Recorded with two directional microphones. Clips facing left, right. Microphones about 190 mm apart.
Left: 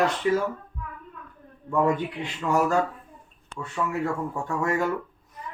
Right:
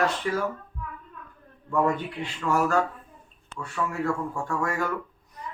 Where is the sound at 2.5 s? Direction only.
20° left (ahead or behind).